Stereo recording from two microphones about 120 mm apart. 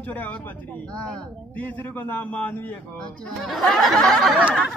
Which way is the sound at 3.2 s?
Centre (ahead or behind).